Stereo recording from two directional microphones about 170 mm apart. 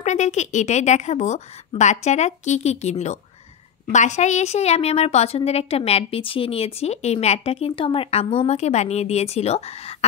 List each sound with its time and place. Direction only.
0.0 s a woman's voice: 45° left (ahead or behind)